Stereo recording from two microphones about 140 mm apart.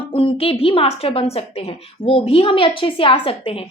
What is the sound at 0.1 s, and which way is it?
A woman's voice, 40° left (ahead or behind).